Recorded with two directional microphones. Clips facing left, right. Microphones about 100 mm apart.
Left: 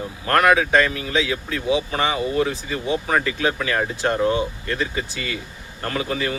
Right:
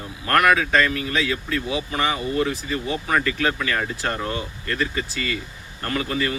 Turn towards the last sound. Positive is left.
turn(degrees=20)  # may be behind; listen again after turning